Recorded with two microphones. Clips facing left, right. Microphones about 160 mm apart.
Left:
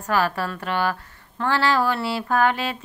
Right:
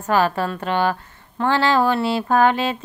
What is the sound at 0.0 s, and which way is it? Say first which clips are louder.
Speech: right 4 dB; 25° right (ahead or behind).